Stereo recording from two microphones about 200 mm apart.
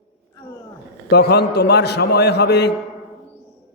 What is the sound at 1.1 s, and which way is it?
A man's voice, 55° left (ahead or behind).